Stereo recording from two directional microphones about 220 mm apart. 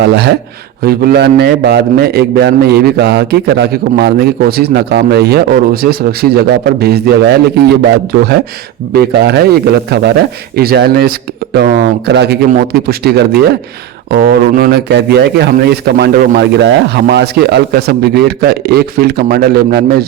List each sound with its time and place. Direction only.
0.0 s a man's voice: 50° right (ahead or behind)
8.9 s a man's voice: 45° right (ahead or behind)